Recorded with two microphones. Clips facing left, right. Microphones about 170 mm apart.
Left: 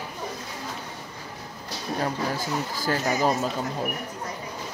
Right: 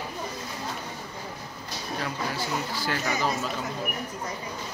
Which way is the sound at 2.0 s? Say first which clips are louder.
Left 4 dB; 45° left (ahead or behind).